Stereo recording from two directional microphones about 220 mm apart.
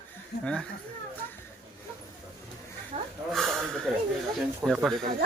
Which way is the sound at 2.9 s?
30° right (ahead or behind).